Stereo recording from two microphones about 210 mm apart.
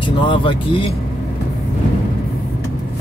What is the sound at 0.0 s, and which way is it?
Speech, 25° left (ahead or behind).